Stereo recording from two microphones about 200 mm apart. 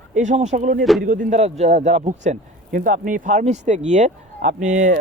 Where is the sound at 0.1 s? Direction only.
35° right (ahead or behind).